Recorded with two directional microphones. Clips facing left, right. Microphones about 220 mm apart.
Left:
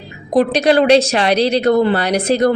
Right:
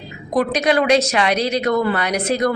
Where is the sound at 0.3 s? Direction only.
30° left (ahead or behind).